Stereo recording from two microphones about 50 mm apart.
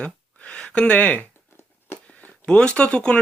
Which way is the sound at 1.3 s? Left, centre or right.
Left.